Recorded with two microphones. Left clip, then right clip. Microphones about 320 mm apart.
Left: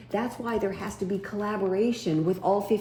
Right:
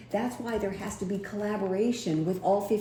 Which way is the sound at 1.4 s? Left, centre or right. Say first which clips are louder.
Left 2 dB; left.